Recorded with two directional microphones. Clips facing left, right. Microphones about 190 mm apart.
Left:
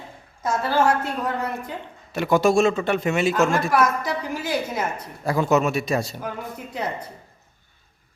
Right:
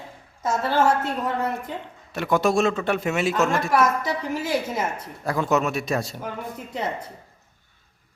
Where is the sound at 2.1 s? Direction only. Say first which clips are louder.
Left 3 dB; centre (ahead or behind).